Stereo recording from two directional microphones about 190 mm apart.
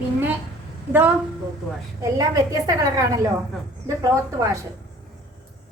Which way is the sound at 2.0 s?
20° right (ahead or behind).